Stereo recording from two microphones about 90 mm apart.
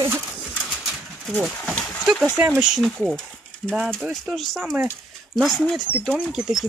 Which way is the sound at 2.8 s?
Centre (ahead or behind).